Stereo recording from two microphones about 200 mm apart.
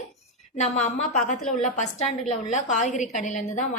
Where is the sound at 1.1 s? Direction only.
35° left (ahead or behind).